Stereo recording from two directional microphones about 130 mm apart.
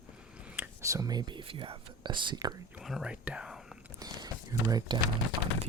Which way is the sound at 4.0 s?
30° right (ahead or behind).